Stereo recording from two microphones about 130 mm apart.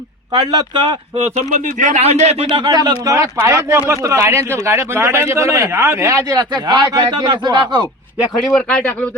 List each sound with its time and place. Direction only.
0.3 s speech: 30° right (ahead or behind)
1.2 s speech: 70° right (ahead or behind); by 2.5 s 55° right (ahead or behind)
2.5 s a man's voice: 35° right (ahead or behind)
8.4 s speech: 5° left (ahead or behind)